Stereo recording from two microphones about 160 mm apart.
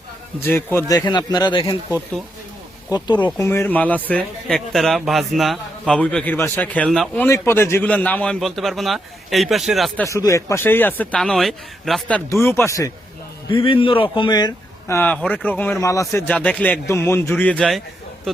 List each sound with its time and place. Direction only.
0.4 s a man's voice: 15° left (ahead or behind)
0.9 s speech: 25° left (ahead or behind)
2.9 s speech: 25° left (ahead or behind)
3.2 s speech: 15° left (ahead or behind); by 10.1 s centre (ahead or behind)
10.1 s a man's voice: 20° left (ahead or behind)
12.3 s a man's voice: 15° left (ahead or behind)
13.5 s a man's voice: 35° left (ahead or behind); by 17.8 s 5° left (ahead or behind)